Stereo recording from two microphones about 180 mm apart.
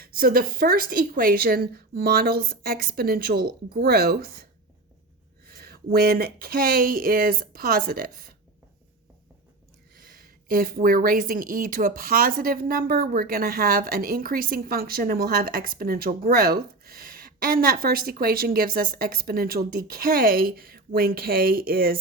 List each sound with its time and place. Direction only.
0.0 s a woman's voice: 55° right (ahead or behind)
5.5 s a woman's voice: 55° right (ahead or behind)
10.0 s speech: 50° right (ahead or behind)